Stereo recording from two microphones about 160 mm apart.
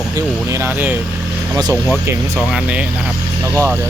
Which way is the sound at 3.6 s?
15° right (ahead or behind).